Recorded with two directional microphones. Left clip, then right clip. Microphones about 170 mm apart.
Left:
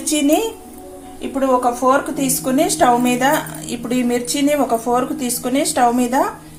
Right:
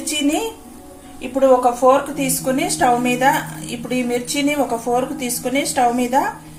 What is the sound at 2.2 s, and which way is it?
A woman's voice, 25° left (ahead or behind).